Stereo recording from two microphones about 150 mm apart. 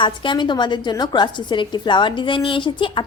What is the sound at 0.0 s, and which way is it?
A woman's voice, 30° left (ahead or behind).